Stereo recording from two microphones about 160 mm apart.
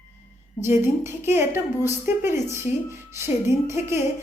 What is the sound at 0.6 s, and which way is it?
A woman's voice, 15° right (ahead or behind).